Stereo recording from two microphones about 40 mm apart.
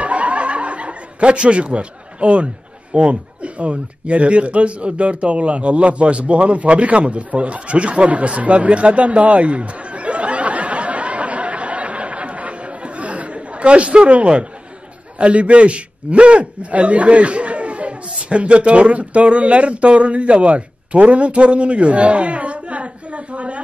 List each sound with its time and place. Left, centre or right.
0.0 s snicker: right
15.1 s a man's voice: right